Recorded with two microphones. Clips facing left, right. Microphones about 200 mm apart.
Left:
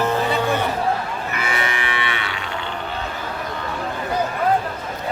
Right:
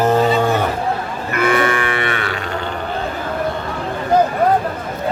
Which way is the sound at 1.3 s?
55° right (ahead or behind).